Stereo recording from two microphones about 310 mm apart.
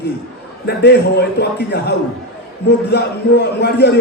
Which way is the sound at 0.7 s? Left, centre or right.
Left.